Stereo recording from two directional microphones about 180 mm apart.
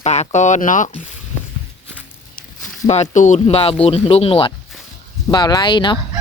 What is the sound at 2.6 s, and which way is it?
Speech, 40° left (ahead or behind).